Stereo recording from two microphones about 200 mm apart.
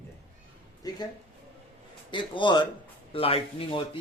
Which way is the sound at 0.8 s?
20° left (ahead or behind).